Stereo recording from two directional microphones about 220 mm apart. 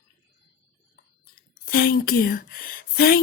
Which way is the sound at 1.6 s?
45° left (ahead or behind).